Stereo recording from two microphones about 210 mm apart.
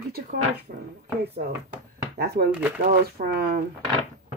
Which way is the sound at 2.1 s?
50° right (ahead or behind).